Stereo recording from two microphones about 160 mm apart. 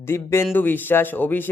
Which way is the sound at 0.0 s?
15° left (ahead or behind).